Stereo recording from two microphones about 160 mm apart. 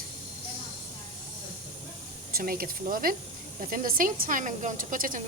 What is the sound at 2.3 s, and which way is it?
A woman's voice, 65° right (ahead or behind).